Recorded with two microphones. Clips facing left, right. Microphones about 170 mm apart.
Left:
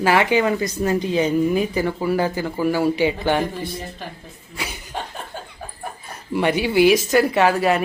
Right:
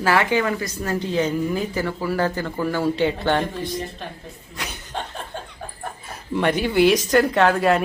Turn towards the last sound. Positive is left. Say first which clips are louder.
# even
turn(degrees=5)  # may be behind; listen again after turning